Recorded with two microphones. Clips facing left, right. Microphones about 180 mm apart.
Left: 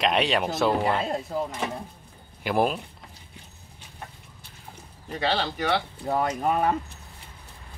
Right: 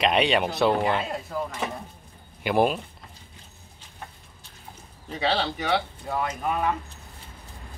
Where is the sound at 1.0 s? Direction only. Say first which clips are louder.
Left 3 dB; 30° left (ahead or behind).